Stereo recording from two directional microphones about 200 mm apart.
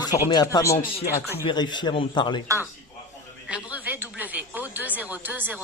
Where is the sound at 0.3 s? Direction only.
20° left (ahead or behind).